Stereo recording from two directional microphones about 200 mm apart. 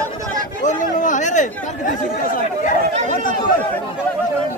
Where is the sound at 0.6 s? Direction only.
40° left (ahead or behind).